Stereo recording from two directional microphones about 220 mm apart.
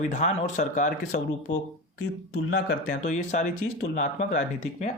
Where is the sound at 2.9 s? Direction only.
35° left (ahead or behind).